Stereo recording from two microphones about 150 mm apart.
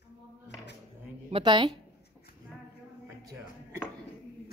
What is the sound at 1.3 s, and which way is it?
Speech, 35° right (ahead or behind).